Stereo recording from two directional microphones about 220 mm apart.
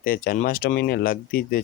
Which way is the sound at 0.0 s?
40° left (ahead or behind).